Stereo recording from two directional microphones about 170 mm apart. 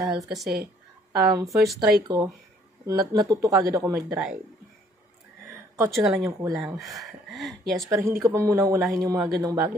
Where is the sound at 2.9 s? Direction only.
25° right (ahead or behind).